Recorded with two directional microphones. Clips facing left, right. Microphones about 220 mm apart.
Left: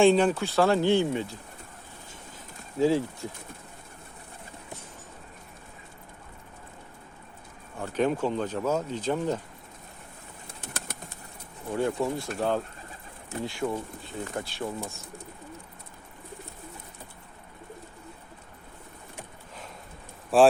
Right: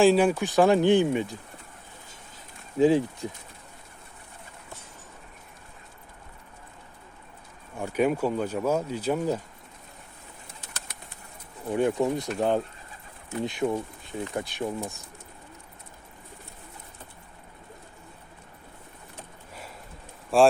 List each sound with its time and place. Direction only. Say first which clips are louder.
0.0 s speech: right 1 dB; 5° right (ahead or behind)
2.7 s speech: right 3 dB; 15° right (ahead or behind)
7.8 s speech: right 2 dB; 10° right (ahead or behind)
10.6 s bird: left 9 dB; 50° left (ahead or behind)
11.7 s speech: right 3 dB; 20° right (ahead or behind)
20.3 s speech: even; 5° left (ahead or behind)